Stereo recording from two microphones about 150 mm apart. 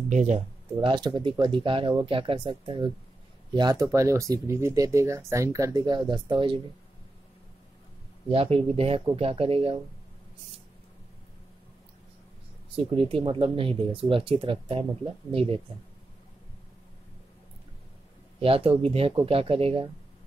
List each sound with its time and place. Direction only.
0.1 s speech: 50° right (ahead or behind)
0.7 s speech: 30° right (ahead or behind)
8.3 s speech: 40° right (ahead or behind)
12.7 s speech: 40° right (ahead or behind)
18.4 s speech: 40° right (ahead or behind)